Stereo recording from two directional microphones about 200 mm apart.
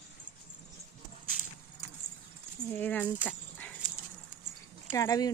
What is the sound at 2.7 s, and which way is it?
Speech, 10° left (ahead or behind).